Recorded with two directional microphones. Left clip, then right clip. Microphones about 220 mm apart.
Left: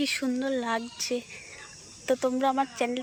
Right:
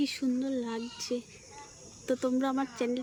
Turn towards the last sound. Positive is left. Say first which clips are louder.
# left 5 dB
turn(degrees=-10)  # may be behind; listen again after turning